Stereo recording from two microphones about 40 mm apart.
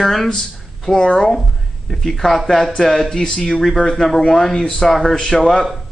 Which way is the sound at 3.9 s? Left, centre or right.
Centre.